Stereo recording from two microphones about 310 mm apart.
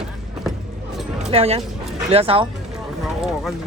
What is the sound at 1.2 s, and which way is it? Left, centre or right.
Speech, centre.